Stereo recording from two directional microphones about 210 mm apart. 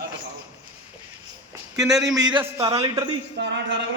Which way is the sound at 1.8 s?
Centre (ahead or behind).